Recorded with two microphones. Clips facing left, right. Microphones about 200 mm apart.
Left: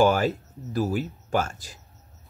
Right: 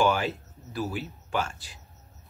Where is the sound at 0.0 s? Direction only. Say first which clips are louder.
Left 4 dB; 40° left (ahead or behind).